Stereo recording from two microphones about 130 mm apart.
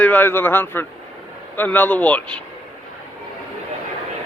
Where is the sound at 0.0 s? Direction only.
15° left (ahead or behind).